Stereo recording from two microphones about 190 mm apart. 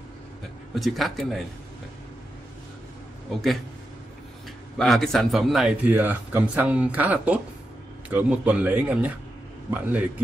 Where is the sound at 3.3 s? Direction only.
Centre (ahead or behind).